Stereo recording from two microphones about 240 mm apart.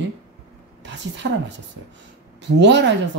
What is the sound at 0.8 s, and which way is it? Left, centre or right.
Speech, right.